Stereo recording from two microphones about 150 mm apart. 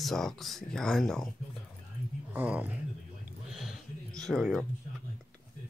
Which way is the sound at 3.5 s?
Centre (ahead or behind).